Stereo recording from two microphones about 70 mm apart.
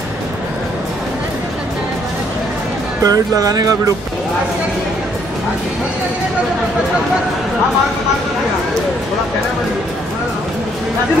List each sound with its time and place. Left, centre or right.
3.0 s speech: right